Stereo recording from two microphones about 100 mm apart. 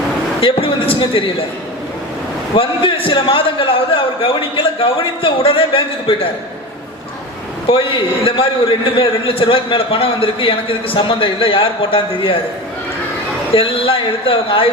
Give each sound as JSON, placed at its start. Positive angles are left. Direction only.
{"t": 0.3, "sound": "a man's voice", "side_deg": 65}
{"t": 2.6, "sound": "a man's voice", "side_deg": 60}
{"t": 7.7, "sound": "a man's voice", "side_deg": 65}
{"t": 13.5, "sound": "a man's voice", "side_deg": 65}